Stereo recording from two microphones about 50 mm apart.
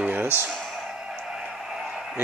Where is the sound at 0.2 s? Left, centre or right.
Right.